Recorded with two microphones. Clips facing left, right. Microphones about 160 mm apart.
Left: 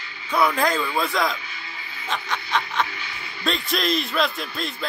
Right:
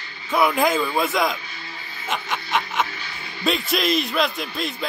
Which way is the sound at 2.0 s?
20° right (ahead or behind).